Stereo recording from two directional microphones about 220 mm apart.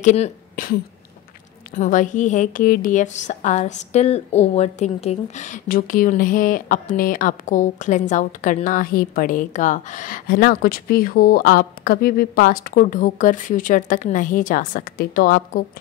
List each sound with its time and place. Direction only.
0.0 s a woman's voice: 35° left (ahead or behind)